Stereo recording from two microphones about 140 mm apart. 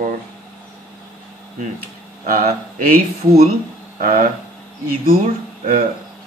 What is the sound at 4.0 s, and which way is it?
Speech, 70° right (ahead or behind).